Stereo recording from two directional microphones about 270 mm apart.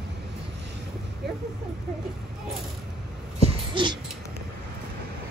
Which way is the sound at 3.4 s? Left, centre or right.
Centre.